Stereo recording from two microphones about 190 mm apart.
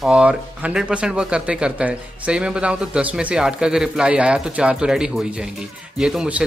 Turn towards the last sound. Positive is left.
turn(degrees=-5)  # may be behind; listen again after turning